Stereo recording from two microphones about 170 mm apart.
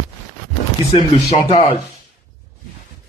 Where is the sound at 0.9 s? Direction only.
30° left (ahead or behind).